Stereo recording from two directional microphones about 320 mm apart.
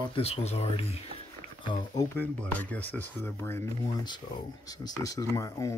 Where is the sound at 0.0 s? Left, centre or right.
Centre.